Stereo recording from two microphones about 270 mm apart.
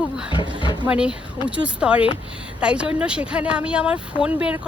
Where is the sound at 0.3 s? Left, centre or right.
Centre.